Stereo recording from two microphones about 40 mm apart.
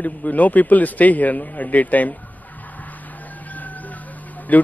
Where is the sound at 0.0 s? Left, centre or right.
Left.